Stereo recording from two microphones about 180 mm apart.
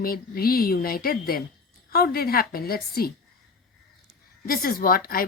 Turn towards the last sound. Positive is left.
turn(degrees=55)  # may be behind; listen again after turning